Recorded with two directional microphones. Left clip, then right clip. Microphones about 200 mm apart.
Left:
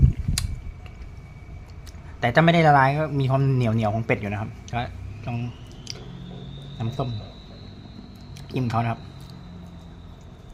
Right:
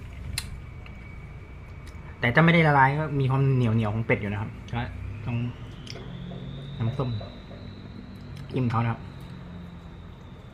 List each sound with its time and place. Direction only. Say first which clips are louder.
2.2 s a man's voice: left 3 dB; 20° left (ahead or behind)
6.7 s speech: left 2 dB; 10° left (ahead or behind)
8.5 s a man's voice: left 3 dB; 20° left (ahead or behind)